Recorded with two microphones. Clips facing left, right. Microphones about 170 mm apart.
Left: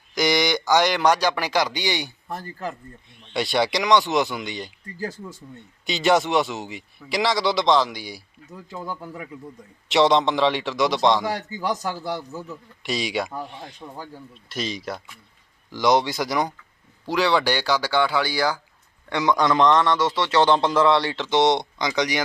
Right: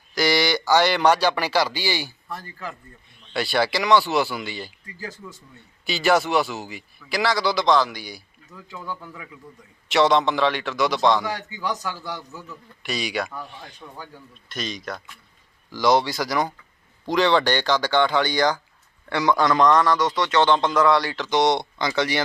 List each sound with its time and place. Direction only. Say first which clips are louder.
0.1 s a man's voice: even; 20° left (ahead or behind)
2.3 s speech: left 5 dB; 40° left (ahead or behind)
3.3 s a man's voice: even; 20° left (ahead or behind)
5.8 s speech: even; 20° left (ahead or behind)
7.9 s a man's voice: left 1 dB; centre (ahead or behind)
8.5 s speech: left 2 dB; 40° left (ahead or behind)
10.1 s speech: left 1 dB; 25° left (ahead or behind)
11.2 s speech: left 2 dB; 40° left (ahead or behind)
12.5 s a man's voice: right 1 dB; 25° left (ahead or behind); by 18.6 s 5° left (ahead or behind)
19.1 s speech: even; 20° left (ahead or behind)